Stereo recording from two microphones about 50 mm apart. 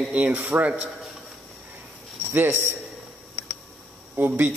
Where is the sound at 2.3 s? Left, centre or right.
Right.